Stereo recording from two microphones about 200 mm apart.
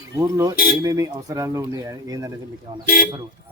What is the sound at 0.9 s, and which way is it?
Speech, 15° right (ahead or behind).